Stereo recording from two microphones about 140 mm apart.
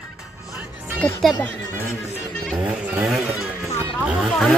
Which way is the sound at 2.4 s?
5° right (ahead or behind).